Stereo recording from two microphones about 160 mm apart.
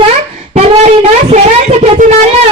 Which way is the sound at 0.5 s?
40° right (ahead or behind).